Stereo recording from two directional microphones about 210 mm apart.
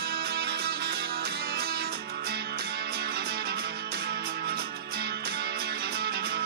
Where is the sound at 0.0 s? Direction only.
50° right (ahead or behind).